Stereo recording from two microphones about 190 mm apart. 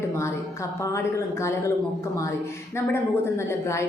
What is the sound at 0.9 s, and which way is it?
Speech, 15° left (ahead or behind).